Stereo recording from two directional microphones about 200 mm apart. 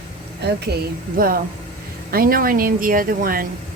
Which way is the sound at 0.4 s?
55° right (ahead or behind).